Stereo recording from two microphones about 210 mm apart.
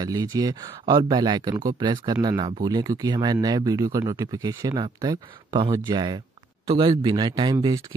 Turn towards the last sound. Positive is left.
turn(degrees=-20)  # may be behind; listen again after turning